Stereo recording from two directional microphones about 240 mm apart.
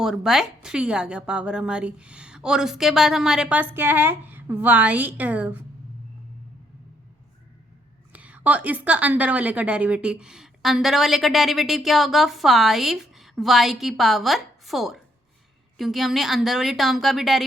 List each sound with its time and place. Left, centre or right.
0.0 s a woman's voice: centre
8.1 s a woman's voice: centre